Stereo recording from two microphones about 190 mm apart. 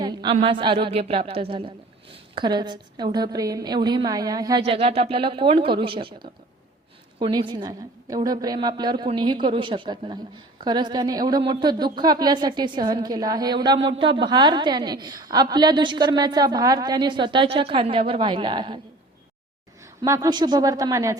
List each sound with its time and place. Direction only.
0.0 s a sound: 25° right (ahead or behind)
0.4 s a woman's voice: 25° right (ahead or behind)
4.6 s a woman's voice: 30° right (ahead or behind)
7.2 s a woman's voice: 25° right (ahead or behind)
20.0 s a woman's voice: 20° right (ahead or behind)